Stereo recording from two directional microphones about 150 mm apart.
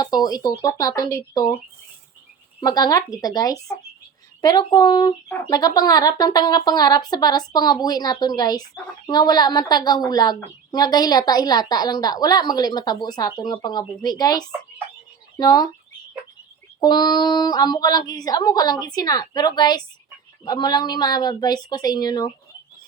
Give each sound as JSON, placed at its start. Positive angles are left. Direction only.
{"t": 0.0, "sound": "a woman's voice", "side_deg": 25}
{"t": 2.6, "sound": "a woman's voice", "side_deg": 25}
{"t": 16.8, "sound": "a woman's voice", "side_deg": 30}